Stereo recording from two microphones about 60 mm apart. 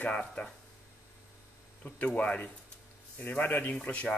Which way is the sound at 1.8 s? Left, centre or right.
Left.